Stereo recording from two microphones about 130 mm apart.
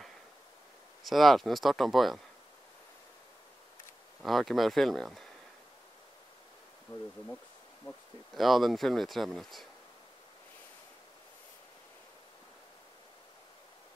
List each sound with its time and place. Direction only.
1.0 s speech: centre (ahead or behind)
4.2 s speech: centre (ahead or behind)
7.8 s speech: 25° left (ahead or behind)
8.4 s speech: centre (ahead or behind)